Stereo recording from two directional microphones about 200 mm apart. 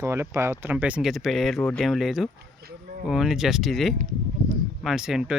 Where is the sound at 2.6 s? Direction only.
45° right (ahead or behind).